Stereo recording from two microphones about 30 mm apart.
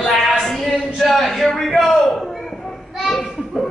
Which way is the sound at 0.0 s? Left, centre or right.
Centre.